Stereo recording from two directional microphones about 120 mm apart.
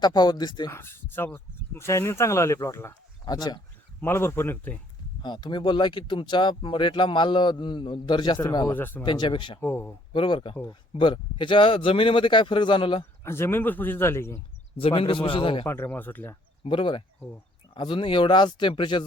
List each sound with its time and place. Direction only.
0.0 s speech: 35° left (ahead or behind)
0.7 s speech: 20° left (ahead or behind)
3.2 s speech: 35° left (ahead or behind)
4.0 s speech: 20° left (ahead or behind)
5.2 s speech: 40° left (ahead or behind)
8.7 s speech: 15° left (ahead or behind)
9.0 s speech: 40° left (ahead or behind)
9.6 s speech: 20° left (ahead or behind)
10.1 s speech: 45° left (ahead or behind)
13.2 s speech: 20° left (ahead or behind)
14.8 s speech: 50° left (ahead or behind)
15.6 s speech: 20° left (ahead or behind)
16.6 s speech: 45° left (ahead or behind)